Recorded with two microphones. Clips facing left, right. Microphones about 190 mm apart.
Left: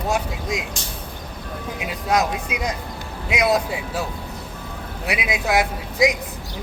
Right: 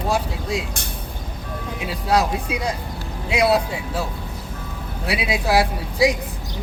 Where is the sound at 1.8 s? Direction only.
30° right (ahead or behind).